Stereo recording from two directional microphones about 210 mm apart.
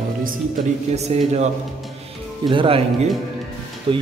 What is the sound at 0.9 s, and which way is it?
A man's voice, 30° right (ahead or behind).